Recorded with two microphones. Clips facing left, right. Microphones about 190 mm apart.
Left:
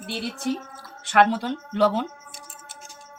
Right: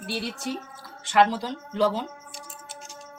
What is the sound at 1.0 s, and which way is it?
Speech, 60° left (ahead or behind).